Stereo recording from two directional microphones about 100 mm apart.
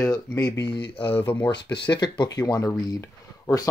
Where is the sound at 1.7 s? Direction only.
45° left (ahead or behind).